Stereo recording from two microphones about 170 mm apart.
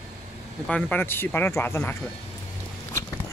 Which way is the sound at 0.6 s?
5° left (ahead or behind).